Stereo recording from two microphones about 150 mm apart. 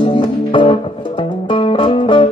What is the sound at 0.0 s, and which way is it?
Music, 30° left (ahead or behind).